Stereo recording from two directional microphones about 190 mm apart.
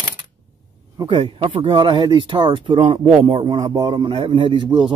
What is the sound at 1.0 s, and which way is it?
Speech, 25° right (ahead or behind).